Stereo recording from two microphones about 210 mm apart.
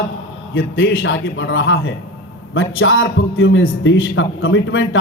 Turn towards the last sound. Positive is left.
turn(degrees=75)  # may be behind; listen again after turning